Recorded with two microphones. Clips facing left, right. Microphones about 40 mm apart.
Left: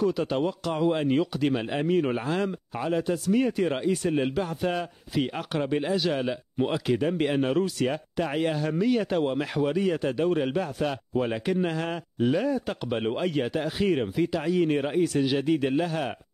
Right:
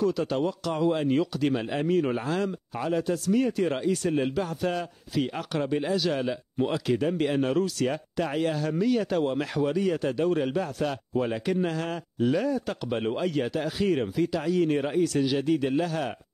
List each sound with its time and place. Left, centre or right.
0.0 s speech: centre